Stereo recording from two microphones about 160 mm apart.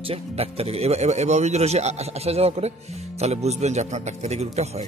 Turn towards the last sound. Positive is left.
turn(degrees=-45)  # may be behind; listen again after turning